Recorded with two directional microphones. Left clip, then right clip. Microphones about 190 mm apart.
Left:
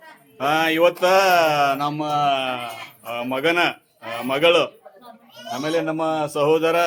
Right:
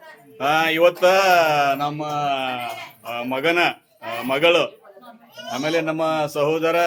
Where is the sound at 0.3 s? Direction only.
10° left (ahead or behind).